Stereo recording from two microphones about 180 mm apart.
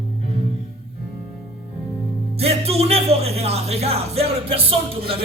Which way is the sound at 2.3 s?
35° right (ahead or behind).